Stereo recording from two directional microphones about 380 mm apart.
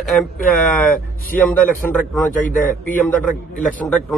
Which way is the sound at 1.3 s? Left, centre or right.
Centre.